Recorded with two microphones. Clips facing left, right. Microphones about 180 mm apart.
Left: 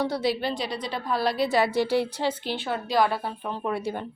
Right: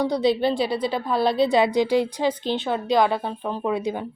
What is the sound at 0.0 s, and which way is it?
A woman's voice, 15° right (ahead or behind).